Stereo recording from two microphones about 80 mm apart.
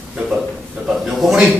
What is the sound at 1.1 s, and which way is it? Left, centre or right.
Speech, centre.